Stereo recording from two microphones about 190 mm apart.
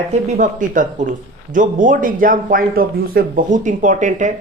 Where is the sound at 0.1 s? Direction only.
40° right (ahead or behind).